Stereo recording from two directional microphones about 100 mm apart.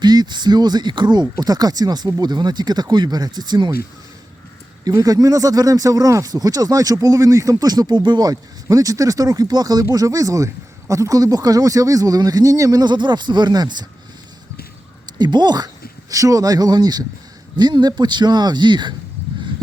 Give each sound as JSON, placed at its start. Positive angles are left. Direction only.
{"t": 0.0, "sound": "speech", "side_deg": -45}
{"t": 4.9, "sound": "speech", "side_deg": -40}
{"t": 15.0, "sound": "speech", "side_deg": -45}